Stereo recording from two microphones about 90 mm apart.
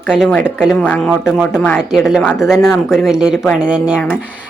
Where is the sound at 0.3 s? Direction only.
20° left (ahead or behind).